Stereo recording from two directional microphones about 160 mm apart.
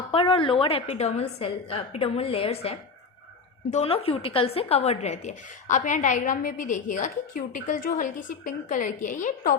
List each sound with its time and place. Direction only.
0.1 s a woman's voice: 35° left (ahead or behind); by 9.6 s 55° left (ahead or behind)